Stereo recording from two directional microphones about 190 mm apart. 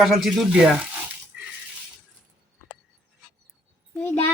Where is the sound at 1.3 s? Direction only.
5° right (ahead or behind).